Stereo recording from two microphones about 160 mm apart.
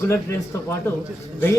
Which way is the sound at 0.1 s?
15° left (ahead or behind).